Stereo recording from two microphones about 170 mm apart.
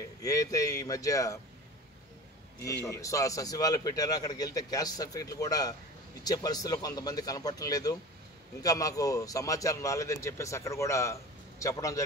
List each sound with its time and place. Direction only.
0.2 s a man's voice: 20° left (ahead or behind)
2.6 s a man's voice: 20° left (ahead or behind)